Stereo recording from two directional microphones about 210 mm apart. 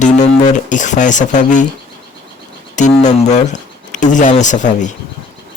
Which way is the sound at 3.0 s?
35° left (ahead or behind).